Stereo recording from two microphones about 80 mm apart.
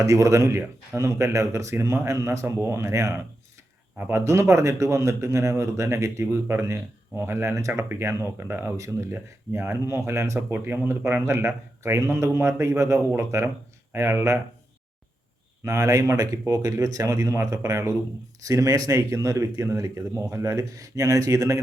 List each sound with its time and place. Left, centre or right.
0.0 s speech: right
3.9 s speech: right
4.2 s speech: right
10.5 s speech: right
15.6 s speech: right